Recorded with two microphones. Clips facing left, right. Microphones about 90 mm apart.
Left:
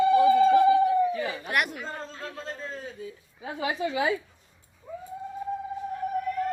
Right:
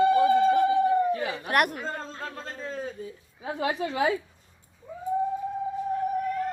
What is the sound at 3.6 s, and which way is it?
Speech, 50° right (ahead or behind).